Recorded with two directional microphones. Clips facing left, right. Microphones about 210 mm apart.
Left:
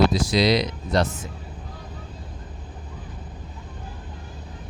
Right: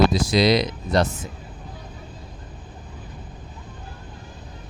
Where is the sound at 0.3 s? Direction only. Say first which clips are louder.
Right 2 dB; 50° right (ahead or behind).